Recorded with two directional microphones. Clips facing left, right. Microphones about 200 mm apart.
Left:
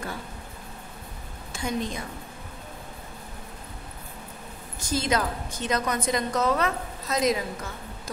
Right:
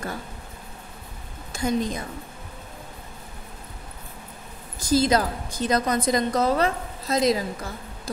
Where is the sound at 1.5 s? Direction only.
40° right (ahead or behind).